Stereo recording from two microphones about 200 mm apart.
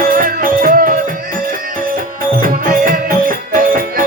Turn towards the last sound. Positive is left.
turn(degrees=-45)  # may be behind; listen again after turning